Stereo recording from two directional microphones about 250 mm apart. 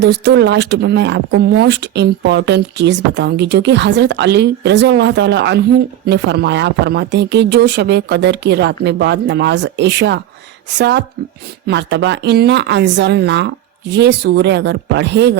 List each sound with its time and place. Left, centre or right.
0.0 s speech: right